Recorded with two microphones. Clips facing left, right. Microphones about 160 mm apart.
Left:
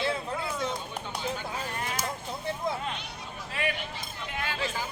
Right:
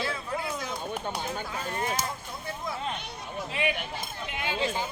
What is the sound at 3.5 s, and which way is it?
Speech, 20° right (ahead or behind).